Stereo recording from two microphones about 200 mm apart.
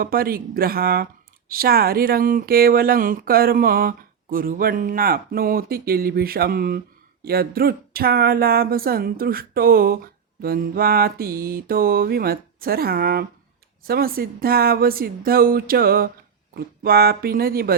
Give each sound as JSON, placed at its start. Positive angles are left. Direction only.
{"t": 0.0, "sound": "speech", "side_deg": -50}